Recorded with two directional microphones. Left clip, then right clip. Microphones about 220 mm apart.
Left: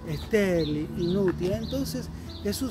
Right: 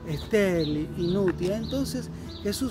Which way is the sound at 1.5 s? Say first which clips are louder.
Right 1 dB; 15° right (ahead or behind).